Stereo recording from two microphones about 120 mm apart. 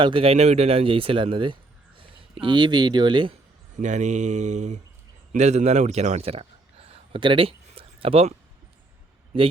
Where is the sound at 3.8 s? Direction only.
80° right.